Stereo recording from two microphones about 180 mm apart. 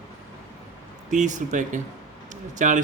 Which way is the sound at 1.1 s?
45° right (ahead or behind).